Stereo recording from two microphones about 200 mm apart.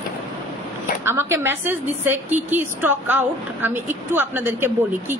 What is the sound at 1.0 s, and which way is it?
A woman's voice, 10° right (ahead or behind).